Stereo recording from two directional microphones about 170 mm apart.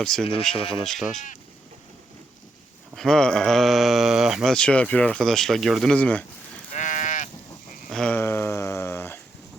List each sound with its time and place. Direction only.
0.0 s speech: 5° left (ahead or behind)
2.9 s speech: centre (ahead or behind)
6.7 s sheep: 45° left (ahead or behind)
7.9 s a sound: 5° left (ahead or behind)